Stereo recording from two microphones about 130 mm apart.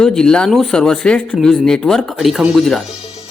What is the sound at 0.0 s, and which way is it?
Speech, 5° left (ahead or behind).